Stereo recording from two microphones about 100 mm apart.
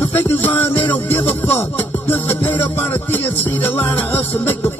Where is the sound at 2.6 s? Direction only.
20° left (ahead or behind).